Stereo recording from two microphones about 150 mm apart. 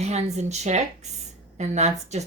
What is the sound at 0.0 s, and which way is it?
Speech, 50° right (ahead or behind).